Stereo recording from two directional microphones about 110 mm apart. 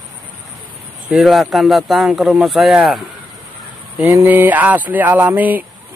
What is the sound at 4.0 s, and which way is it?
Speech, 20° right (ahead or behind).